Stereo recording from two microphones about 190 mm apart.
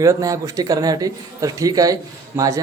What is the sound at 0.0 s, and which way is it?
Speech, 15° right (ahead or behind).